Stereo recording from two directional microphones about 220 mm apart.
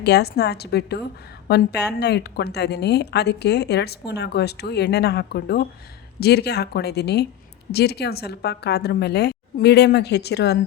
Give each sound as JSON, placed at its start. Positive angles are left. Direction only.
{"t": 0.0, "sound": "a woman's voice", "side_deg": 50}